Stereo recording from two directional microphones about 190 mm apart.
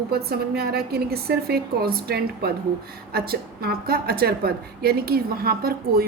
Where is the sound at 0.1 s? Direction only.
55° right (ahead or behind).